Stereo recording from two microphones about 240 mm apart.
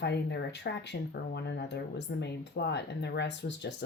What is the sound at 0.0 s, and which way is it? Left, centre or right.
Speech, left.